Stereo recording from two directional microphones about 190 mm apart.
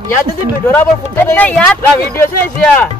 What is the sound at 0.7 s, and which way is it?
Speech, 10° left (ahead or behind).